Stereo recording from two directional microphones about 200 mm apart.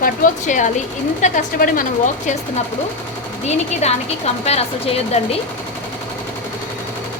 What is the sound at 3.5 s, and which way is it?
A woman's voice, 35° left (ahead or behind).